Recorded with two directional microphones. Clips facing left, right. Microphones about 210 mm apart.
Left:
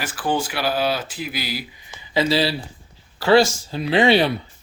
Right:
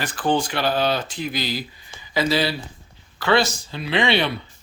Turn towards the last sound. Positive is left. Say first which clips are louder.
# left 5 dB
turn(degrees=40)  # may be behind; listen again after turning